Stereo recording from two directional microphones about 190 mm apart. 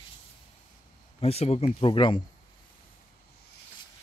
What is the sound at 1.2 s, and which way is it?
Speech, 30° left (ahead or behind).